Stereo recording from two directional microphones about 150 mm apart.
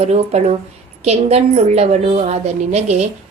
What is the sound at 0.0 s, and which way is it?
A woman's voice, 45° right (ahead or behind).